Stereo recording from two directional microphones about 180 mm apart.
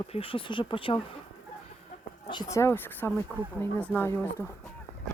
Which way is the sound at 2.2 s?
20° left (ahead or behind).